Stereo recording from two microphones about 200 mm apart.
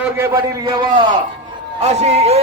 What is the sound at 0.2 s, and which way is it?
Speech, 15° right (ahead or behind).